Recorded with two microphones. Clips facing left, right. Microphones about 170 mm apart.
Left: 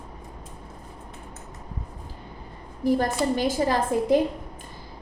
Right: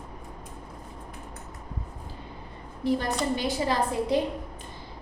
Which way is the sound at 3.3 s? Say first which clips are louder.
Left 3 dB; 50° left (ahead or behind).